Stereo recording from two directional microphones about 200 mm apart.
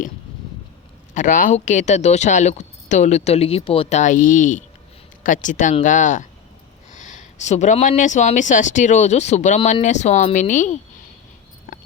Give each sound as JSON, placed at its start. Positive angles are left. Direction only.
{"t": 1.1, "sound": "speech", "side_deg": 40}